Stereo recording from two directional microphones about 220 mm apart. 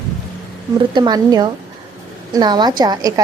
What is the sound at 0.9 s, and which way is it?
A woman's voice, 20° right (ahead or behind).